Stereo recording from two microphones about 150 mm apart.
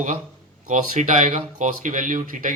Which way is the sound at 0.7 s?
55° right (ahead or behind).